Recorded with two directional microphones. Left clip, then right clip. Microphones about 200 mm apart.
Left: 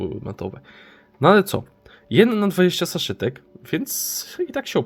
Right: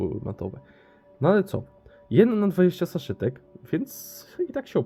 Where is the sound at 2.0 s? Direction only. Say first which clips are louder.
Left 3 dB; 5° left (ahead or behind).